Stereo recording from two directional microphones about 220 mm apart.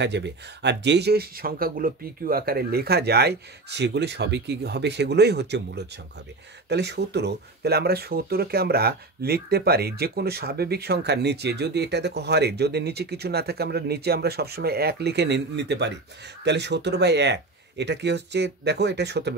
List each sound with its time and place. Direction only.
0.0 s speech: 50° right (ahead or behind)